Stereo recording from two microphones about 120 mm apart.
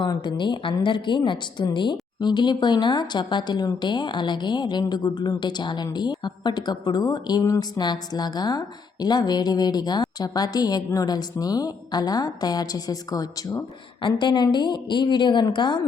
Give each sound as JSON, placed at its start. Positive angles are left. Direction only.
{"t": 0.0, "sound": "a woman's voice", "side_deg": 40}
{"t": 14.2, "sound": "a woman's voice", "side_deg": 40}